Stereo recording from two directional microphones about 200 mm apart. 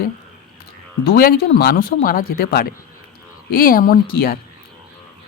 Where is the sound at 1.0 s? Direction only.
45° left (ahead or behind).